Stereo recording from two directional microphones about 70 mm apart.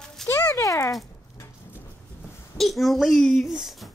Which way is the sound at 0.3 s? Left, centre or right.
Left.